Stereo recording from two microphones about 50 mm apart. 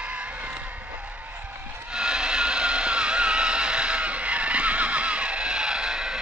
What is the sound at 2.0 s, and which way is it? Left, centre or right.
Vehicle, centre.